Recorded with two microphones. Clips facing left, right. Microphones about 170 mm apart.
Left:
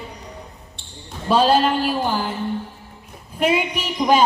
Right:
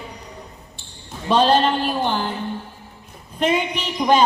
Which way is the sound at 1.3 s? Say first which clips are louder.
Even; 5° left (ahead or behind).